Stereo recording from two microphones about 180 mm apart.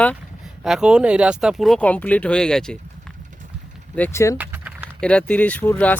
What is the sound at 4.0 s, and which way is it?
Speech, 15° left (ahead or behind).